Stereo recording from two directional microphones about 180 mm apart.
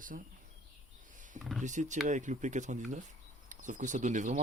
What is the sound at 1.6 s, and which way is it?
Speech, 45° right (ahead or behind).